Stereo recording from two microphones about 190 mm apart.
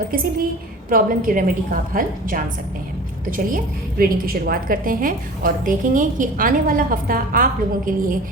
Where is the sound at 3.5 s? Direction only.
50° right (ahead or behind).